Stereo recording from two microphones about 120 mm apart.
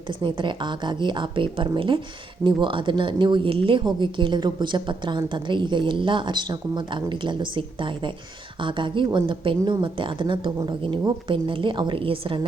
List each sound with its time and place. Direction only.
0.1 s a woman's voice: 40° right (ahead or behind)